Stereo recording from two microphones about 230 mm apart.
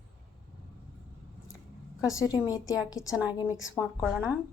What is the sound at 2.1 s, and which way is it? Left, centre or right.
A woman's voice, centre.